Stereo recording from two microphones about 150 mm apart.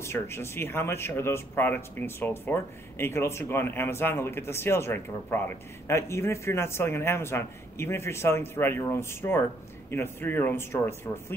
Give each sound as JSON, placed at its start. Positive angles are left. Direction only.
{"t": 0.0, "sound": "speech", "side_deg": 15}